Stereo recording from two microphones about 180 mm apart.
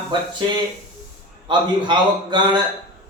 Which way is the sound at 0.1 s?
25° right (ahead or behind).